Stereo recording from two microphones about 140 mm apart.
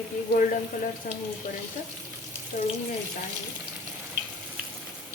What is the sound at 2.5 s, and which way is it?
Speech, 55° left (ahead or behind).